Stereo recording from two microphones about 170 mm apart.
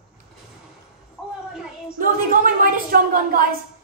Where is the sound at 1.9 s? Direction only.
50° right (ahead or behind).